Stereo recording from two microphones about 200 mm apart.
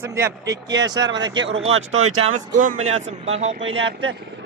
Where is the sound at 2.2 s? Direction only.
40° right (ahead or behind).